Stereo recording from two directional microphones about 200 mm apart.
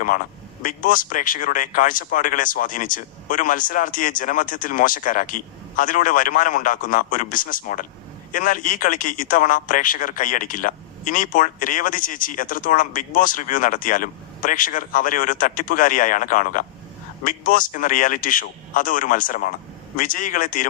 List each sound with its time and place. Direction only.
0.6 s a man's voice: 40° left (ahead or behind)